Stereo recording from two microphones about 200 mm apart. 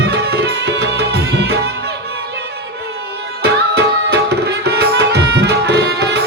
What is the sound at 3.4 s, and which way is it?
Tabla, 55° right (ahead or behind).